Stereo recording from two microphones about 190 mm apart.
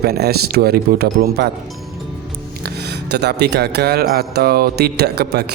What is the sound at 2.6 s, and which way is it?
Speech, 60° right (ahead or behind).